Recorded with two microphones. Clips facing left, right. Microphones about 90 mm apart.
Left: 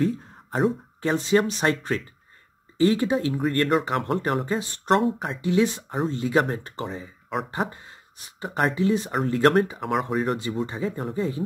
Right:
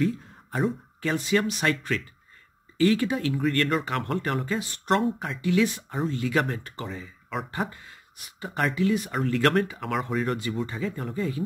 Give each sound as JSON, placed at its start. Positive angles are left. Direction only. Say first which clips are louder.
{"t": 0.0, "sound": "a sound", "louder": "left 2 dB", "side_deg": 35}
{"t": 1.0, "sound": "speech", "louder": "left 3 dB", "side_deg": 30}
{"t": 9.8, "sound": "speech", "louder": "left 3 dB", "side_deg": 15}